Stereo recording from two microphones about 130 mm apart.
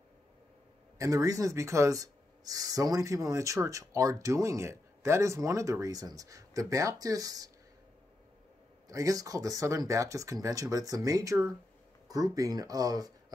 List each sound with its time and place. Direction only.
0.9 s speech: 25° right (ahead or behind)
8.8 s speech: 25° right (ahead or behind)